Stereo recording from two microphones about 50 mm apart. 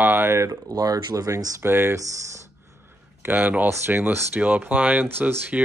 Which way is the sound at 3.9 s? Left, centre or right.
Right.